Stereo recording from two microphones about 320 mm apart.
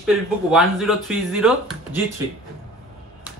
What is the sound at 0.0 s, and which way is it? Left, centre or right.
A man's voice, centre.